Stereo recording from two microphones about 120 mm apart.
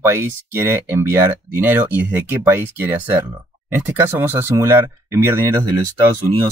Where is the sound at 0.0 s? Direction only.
20° right (ahead or behind).